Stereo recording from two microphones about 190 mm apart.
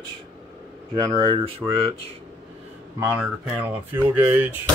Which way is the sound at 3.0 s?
10° right (ahead or behind).